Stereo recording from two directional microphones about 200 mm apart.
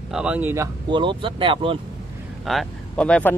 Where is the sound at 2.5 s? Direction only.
5° left (ahead or behind).